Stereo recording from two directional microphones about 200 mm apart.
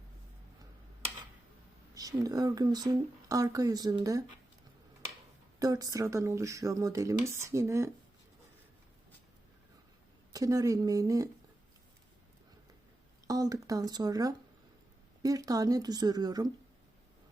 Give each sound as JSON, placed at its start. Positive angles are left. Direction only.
{"t": 2.0, "sound": "speech", "side_deg": -15}
{"t": 5.5, "sound": "speech", "side_deg": -20}
{"t": 10.3, "sound": "speech", "side_deg": -15}
{"t": 13.2, "sound": "speech", "side_deg": -15}